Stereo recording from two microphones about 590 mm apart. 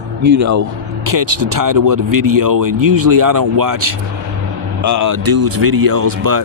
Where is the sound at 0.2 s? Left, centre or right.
Right.